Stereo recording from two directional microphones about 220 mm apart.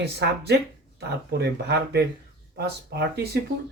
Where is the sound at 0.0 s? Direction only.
50° right (ahead or behind).